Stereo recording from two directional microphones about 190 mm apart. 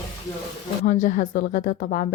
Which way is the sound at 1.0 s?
45° left (ahead or behind).